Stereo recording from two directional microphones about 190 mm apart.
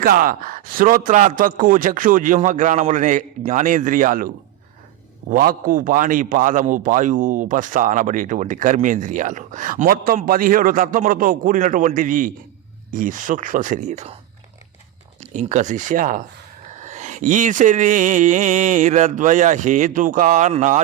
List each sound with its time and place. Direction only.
0.0 s a man's voice: 50° right (ahead or behind)
5.3 s a man's voice: 50° right (ahead or behind)
15.2 s a sound: 40° right (ahead or behind)